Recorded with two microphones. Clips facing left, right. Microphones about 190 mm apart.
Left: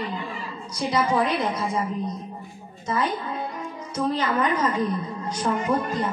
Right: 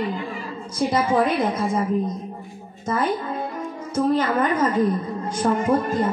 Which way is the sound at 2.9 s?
50° right (ahead or behind).